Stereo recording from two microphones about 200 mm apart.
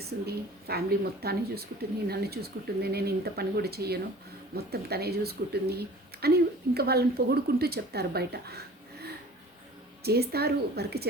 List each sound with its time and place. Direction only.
0.0 s a woman's voice: 50° right (ahead or behind)